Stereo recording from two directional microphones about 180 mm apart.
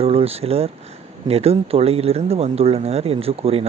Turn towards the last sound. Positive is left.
turn(degrees=-35)  # may be behind; listen again after turning